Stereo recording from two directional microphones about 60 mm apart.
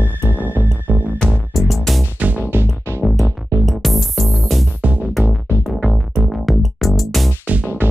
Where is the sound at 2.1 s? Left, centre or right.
Right.